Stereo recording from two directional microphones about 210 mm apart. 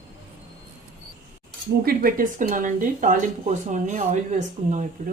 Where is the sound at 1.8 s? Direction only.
40° right (ahead or behind).